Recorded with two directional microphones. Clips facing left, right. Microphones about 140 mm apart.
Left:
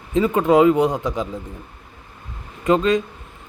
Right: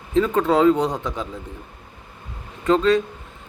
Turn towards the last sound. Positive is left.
turn(degrees=15)  # may be behind; listen again after turning